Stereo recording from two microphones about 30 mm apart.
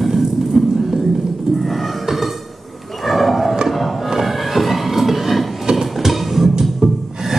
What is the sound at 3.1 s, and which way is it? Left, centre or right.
Roaring cats, centre.